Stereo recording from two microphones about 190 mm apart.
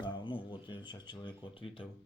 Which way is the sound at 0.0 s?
25° left (ahead or behind).